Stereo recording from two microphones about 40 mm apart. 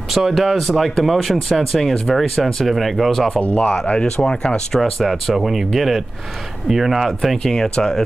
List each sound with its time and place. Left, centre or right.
0.1 s speech: centre
3.3 s speech: left
4.7 s speech: centre
7.5 s speech: centre